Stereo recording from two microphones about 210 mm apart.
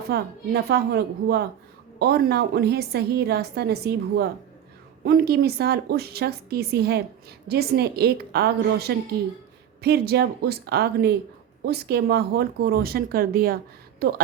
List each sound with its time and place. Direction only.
0.1 s a woman's voice: 50° right (ahead or behind)